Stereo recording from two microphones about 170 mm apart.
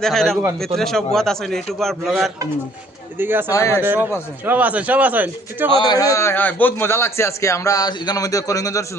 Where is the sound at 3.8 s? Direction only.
10° right (ahead or behind).